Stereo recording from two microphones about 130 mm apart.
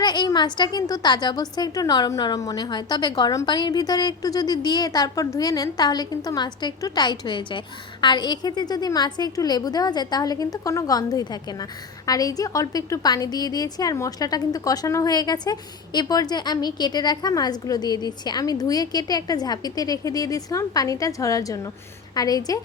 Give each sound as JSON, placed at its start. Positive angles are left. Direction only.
{"t": 0.0, "sound": "a woman's voice", "side_deg": 35}